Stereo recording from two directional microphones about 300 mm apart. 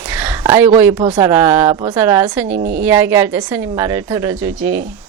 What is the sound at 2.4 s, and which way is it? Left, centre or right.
Speech, right.